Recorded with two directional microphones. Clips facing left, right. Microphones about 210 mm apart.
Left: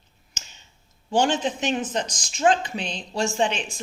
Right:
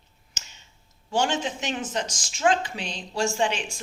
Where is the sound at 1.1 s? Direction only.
15° left (ahead or behind).